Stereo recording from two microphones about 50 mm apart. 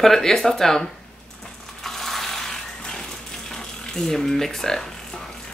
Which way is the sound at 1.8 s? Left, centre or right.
Centre.